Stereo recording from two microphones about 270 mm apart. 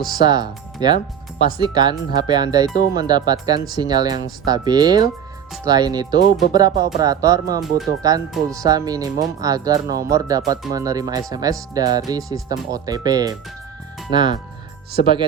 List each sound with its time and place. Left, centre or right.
0.2 s speech: centre